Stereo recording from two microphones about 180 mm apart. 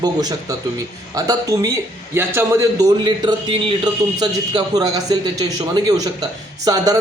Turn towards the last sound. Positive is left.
turn(degrees=-20)  # may be behind; listen again after turning